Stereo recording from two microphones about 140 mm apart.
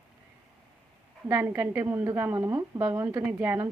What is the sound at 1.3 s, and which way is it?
A woman's voice, 15° right (ahead or behind).